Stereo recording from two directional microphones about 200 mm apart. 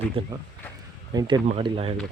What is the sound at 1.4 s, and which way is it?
Speech, 30° right (ahead or behind).